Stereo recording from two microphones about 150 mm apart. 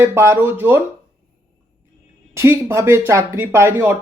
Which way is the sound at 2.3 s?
15° right (ahead or behind).